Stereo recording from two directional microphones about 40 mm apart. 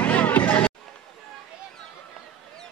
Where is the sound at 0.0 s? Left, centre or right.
Left.